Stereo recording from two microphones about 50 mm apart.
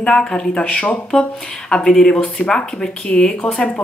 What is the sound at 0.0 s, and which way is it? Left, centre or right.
Speech, centre.